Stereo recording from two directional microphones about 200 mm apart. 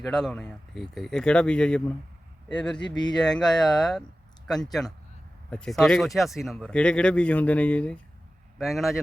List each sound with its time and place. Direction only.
0.0 s speech: 5° left (ahead or behind)
2.8 s speech: 20° left (ahead or behind)
3.2 s speech: 5° left (ahead or behind)